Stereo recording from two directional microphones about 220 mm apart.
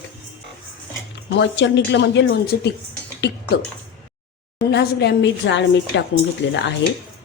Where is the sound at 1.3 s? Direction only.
55° left (ahead or behind).